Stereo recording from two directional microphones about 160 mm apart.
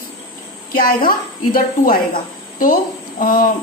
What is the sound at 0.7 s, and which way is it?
A woman's voice, 65° left (ahead or behind).